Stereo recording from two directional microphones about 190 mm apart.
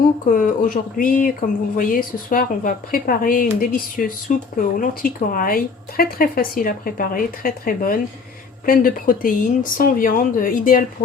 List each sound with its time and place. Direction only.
0.3 s speech: 45° left (ahead or behind)